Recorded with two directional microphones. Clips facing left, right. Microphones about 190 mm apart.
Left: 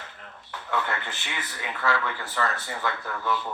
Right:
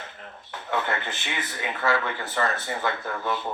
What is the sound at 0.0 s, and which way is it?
A man's voice, 20° right (ahead or behind).